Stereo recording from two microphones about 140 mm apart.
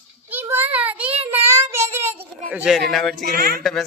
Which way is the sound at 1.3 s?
20° right (ahead or behind).